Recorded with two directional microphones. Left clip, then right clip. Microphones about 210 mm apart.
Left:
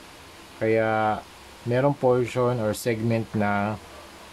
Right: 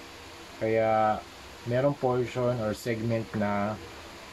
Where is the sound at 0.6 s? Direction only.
40° left (ahead or behind).